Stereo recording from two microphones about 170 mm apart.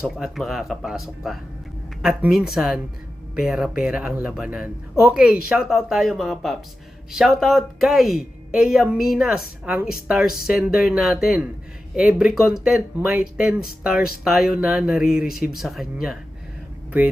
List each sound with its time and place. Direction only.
0.2 s speech: centre (ahead or behind)